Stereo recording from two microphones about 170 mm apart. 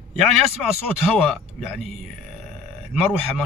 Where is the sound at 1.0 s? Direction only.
Centre (ahead or behind).